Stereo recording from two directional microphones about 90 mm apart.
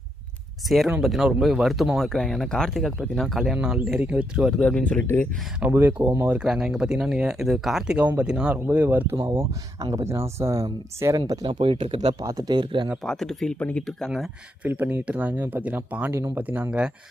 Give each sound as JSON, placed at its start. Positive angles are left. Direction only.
{"t": 1.0, "sound": "speech", "side_deg": 0}
{"t": 4.5, "sound": "speech", "side_deg": 10}
{"t": 5.5, "sound": "speech", "side_deg": -20}
{"t": 9.9, "sound": "speech", "side_deg": -35}
{"t": 11.4, "sound": "speech", "side_deg": -70}
{"t": 12.2, "sound": "speech", "side_deg": -45}
{"t": 13.0, "sound": "speech", "side_deg": 5}
{"t": 14.6, "sound": "speech", "side_deg": -25}